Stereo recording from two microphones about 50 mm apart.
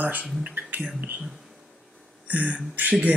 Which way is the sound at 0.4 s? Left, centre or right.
Right.